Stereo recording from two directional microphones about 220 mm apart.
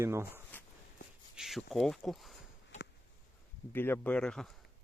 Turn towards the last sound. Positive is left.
turn(degrees=5)  # may be behind; listen again after turning